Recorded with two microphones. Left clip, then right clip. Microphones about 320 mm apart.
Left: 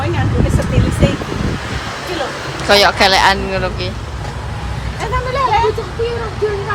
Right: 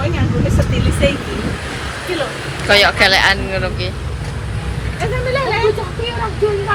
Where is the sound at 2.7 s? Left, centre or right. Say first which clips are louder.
Left 1 dB; centre.